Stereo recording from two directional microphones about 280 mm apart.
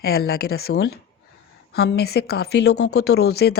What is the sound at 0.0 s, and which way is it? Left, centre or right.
A woman's voice, left.